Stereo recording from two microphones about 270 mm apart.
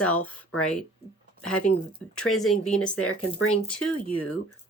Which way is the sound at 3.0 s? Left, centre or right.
Left.